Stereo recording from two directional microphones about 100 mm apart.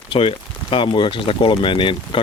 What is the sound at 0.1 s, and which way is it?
Speech, 65° left (ahead or behind).